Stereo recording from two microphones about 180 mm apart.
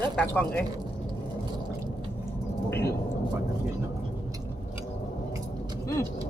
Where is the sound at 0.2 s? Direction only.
10° left (ahead or behind).